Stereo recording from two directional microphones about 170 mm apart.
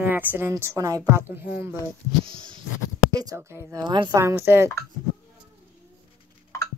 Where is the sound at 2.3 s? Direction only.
30° right (ahead or behind).